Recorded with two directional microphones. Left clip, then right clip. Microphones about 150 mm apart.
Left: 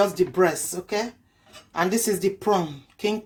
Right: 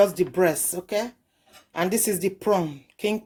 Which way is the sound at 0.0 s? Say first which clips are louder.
Right 1 dB; 75° right (ahead or behind).